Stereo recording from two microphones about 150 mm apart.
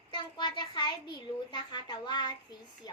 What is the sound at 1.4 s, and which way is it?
A woman's voice, 30° left (ahead or behind).